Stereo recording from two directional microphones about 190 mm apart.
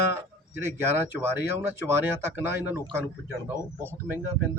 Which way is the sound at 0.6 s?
10° right (ahead or behind).